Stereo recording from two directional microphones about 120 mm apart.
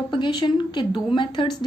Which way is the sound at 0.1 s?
40° left (ahead or behind).